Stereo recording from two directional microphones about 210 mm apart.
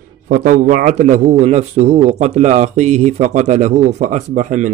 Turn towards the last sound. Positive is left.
turn(degrees=-35)  # may be behind; listen again after turning